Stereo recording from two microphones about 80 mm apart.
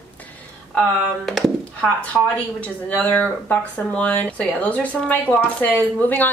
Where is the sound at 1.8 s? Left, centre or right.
Left.